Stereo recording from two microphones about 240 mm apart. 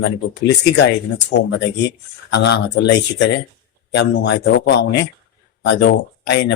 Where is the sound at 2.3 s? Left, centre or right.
Left.